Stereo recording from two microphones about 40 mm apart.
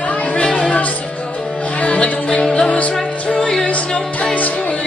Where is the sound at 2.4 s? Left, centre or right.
Centre.